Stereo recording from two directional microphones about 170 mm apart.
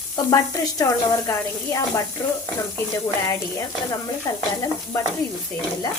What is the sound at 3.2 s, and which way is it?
Speech, 20° left (ahead or behind).